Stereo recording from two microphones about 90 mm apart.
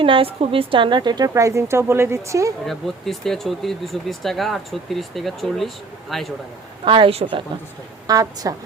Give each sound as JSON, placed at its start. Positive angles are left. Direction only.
{"t": 0.0, "sound": "a woman's voice", "side_deg": -85}
{"t": 1.3, "sound": "speech", "side_deg": -35}
{"t": 2.6, "sound": "speech", "side_deg": 5}
{"t": 6.8, "sound": "a woman's voice", "side_deg": -70}
{"t": 8.0, "sound": "a woman's voice", "side_deg": -45}